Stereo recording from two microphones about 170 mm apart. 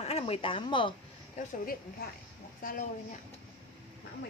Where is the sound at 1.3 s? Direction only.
55° left (ahead or behind).